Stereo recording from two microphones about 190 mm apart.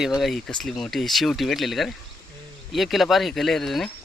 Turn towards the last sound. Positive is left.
turn(degrees=0)  # may be behind; listen again after turning